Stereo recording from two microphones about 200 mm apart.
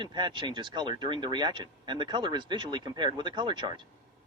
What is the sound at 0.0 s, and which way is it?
Speech, 25° right (ahead or behind).